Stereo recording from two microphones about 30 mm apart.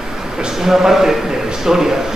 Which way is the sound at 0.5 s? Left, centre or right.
Centre.